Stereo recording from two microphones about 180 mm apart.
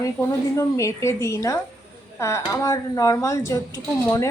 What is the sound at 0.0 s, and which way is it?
A woman's voice, 15° left (ahead or behind).